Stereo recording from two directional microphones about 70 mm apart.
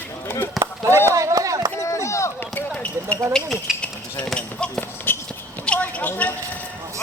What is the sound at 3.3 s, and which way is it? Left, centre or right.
Speech, centre.